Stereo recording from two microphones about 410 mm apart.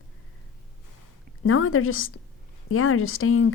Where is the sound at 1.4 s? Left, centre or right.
Left.